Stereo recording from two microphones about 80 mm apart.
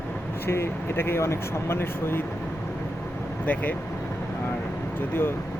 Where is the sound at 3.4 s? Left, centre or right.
Left.